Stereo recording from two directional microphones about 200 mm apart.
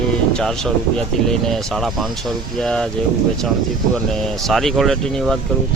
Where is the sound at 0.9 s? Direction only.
Centre (ahead or behind).